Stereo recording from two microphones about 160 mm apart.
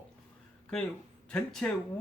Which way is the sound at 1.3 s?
5° left (ahead or behind).